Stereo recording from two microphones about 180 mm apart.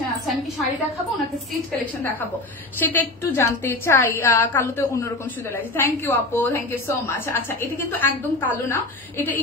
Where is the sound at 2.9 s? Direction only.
10° left (ahead or behind).